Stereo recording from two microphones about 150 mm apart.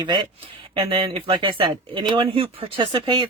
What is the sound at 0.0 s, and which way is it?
Speech, 35° right (ahead or behind).